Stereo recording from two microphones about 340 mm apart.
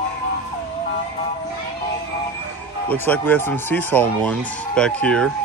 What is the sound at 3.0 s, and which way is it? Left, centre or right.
Speech, centre.